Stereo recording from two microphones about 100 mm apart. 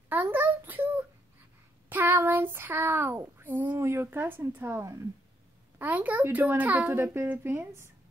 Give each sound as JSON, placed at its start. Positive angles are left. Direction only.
{"t": 0.1, "sound": "a sound", "side_deg": -20}
{"t": 1.9, "sound": "speech", "side_deg": -20}
{"t": 5.8, "sound": "speech", "side_deg": -15}